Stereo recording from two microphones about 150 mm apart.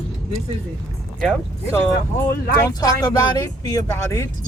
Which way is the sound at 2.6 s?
25° left (ahead or behind).